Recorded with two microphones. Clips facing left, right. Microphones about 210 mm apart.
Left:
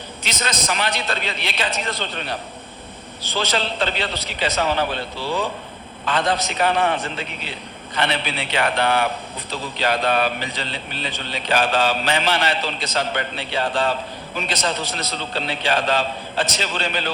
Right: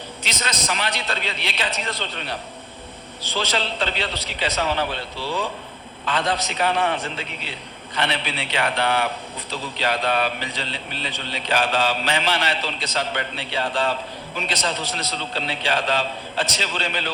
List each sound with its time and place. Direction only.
0.2 s a man's voice: 45° left (ahead or behind)
3.3 s a man's voice: 45° left (ahead or behind)